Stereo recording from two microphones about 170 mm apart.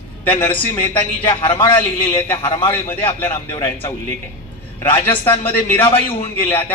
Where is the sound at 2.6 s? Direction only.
15° left (ahead or behind).